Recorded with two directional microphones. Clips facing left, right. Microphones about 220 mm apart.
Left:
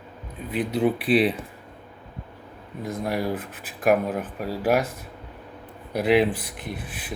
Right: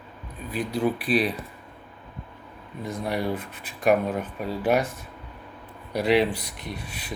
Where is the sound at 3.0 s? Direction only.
5° left (ahead or behind).